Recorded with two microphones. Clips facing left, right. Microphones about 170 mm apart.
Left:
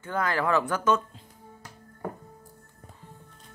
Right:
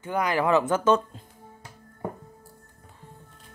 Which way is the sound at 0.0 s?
15° right (ahead or behind).